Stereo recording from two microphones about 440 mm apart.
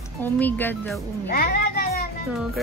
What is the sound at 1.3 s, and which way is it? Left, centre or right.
Music, centre.